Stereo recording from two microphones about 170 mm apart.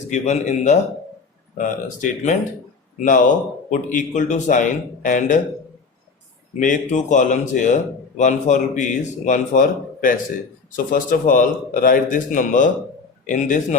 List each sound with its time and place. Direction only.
0.1 s a man's voice: 45° left (ahead or behind)
6.6 s a man's voice: 45° left (ahead or behind)